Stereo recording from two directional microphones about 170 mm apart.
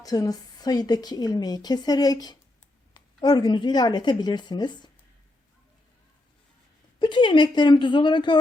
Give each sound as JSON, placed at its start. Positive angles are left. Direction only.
{"t": 0.0, "sound": "a woman's voice", "side_deg": 20}
{"t": 7.0, "sound": "a woman's voice", "side_deg": 30}